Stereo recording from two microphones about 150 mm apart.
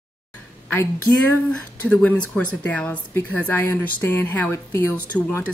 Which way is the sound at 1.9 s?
10° left (ahead or behind).